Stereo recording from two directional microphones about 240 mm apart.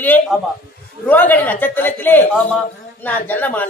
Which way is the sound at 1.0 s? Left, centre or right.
Centre.